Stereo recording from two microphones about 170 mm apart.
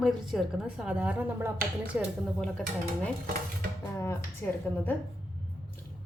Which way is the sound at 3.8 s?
15° left (ahead or behind).